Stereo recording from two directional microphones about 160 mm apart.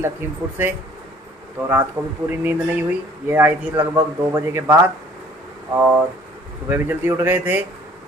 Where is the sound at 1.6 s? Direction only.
10° right (ahead or behind).